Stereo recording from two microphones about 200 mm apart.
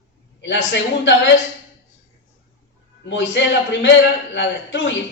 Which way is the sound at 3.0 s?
65° left (ahead or behind).